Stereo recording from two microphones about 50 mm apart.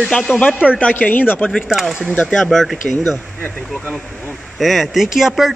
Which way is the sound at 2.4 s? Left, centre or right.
Centre.